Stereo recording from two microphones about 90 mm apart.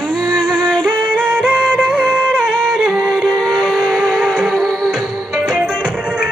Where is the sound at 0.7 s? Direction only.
15° right (ahead or behind).